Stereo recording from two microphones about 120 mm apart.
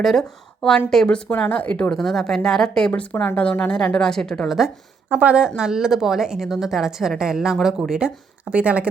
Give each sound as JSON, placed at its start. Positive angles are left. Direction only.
{"t": 0.0, "sound": "a woman's voice", "side_deg": 5}
{"t": 5.0, "sound": "a woman's voice", "side_deg": -10}